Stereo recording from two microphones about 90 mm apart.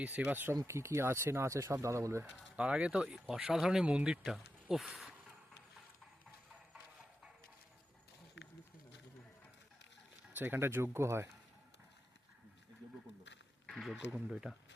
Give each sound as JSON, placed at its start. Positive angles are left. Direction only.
{"t": 0.0, "sound": "speech", "side_deg": -15}
{"t": 2.3, "sound": "speech", "side_deg": -15}
{"t": 10.3, "sound": "speech", "side_deg": -25}
{"t": 13.7, "sound": "speech", "side_deg": 5}